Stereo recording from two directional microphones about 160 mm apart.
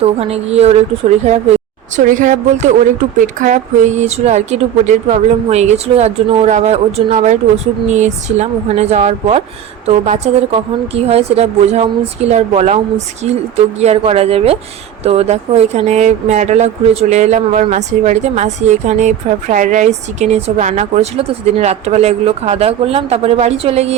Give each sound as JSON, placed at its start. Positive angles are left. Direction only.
{"t": 0.0, "sound": "a woman's voice", "side_deg": -40}